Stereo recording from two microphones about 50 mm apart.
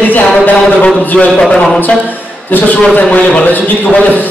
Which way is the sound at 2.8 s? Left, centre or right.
Left.